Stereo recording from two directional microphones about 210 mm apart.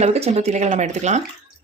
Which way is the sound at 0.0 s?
30° right (ahead or behind).